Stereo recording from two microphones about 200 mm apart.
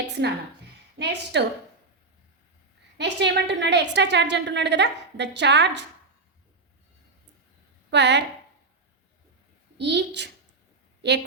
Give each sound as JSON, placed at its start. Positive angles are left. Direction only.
{"t": 0.9, "sound": "a woman's voice", "side_deg": -55}
{"t": 3.0, "sound": "a woman's voice", "side_deg": -60}
{"t": 7.9, "sound": "speech", "side_deg": -60}
{"t": 9.7, "sound": "a woman's voice", "side_deg": -60}